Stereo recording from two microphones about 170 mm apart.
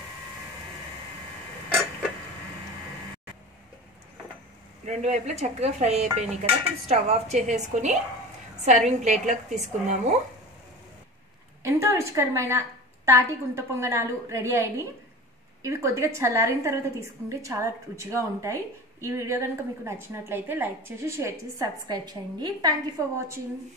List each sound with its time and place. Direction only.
4.8 s dishes: 45° right (ahead or behind)
6.9 s a woman's voice: 40° right (ahead or behind)
11.6 s a woman's voice: 15° right (ahead or behind)